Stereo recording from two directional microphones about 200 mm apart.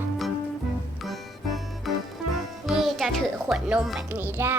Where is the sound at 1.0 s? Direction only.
Centre (ahead or behind).